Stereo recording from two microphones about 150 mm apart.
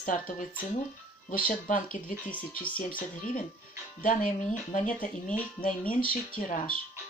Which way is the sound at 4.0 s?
60° left (ahead or behind).